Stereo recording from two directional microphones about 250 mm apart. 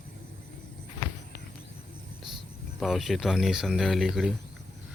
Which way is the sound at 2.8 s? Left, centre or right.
Centre.